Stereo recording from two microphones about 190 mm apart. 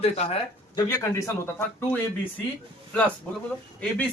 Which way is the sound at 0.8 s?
20° left (ahead or behind).